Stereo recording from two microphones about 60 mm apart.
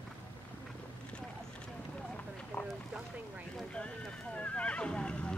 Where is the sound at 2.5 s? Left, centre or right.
Left.